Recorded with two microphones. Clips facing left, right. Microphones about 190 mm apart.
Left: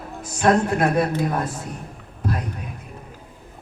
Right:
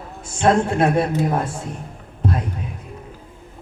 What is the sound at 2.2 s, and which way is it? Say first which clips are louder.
Music: right 3 dB; 30° right (ahead or behind).